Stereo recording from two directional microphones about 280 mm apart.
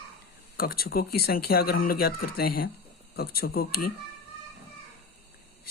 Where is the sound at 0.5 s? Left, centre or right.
Left.